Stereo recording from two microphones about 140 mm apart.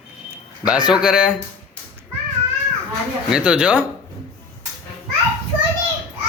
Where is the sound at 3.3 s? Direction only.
5° right (ahead or behind).